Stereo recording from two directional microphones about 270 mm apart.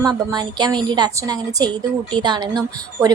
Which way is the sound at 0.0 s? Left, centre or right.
Centre.